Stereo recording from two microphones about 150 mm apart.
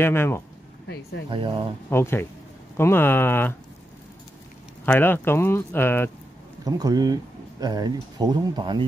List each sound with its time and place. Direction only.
0.0 s speech: 15° left (ahead or behind)
1.3 s speech: 35° right (ahead or behind)
1.9 s speech: 15° left (ahead or behind)
4.8 s speech: 10° left (ahead or behind)
6.6 s speech: 25° right (ahead or behind)